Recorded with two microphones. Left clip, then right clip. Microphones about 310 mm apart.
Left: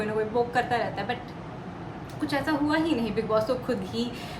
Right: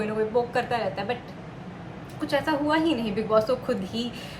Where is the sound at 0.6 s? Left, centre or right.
Left.